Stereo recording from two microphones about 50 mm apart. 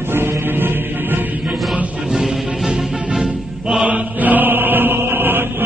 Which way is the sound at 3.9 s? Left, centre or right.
Right.